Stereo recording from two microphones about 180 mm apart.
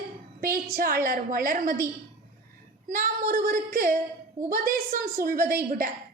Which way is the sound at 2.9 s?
50° right (ahead or behind).